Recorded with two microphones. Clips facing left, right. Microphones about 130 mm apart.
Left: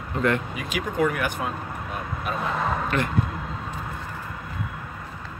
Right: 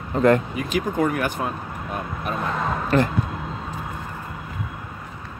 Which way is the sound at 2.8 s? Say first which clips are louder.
Right 6 dB; 35° right (ahead or behind).